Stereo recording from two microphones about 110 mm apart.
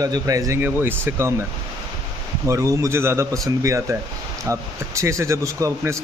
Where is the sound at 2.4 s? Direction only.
30° right (ahead or behind).